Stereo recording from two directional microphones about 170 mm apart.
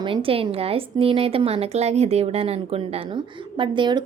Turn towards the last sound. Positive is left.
turn(degrees=-25)  # may be behind; listen again after turning